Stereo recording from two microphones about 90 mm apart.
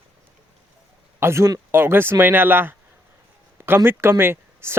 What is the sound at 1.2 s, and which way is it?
Speech, 30° right (ahead or behind).